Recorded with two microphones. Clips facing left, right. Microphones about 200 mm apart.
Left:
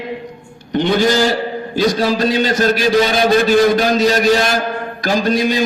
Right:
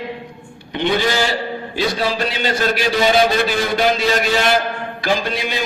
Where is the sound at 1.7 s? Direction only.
40° left (ahead or behind).